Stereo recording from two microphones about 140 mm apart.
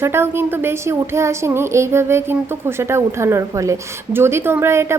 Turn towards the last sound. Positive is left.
turn(degrees=-20)  # may be behind; listen again after turning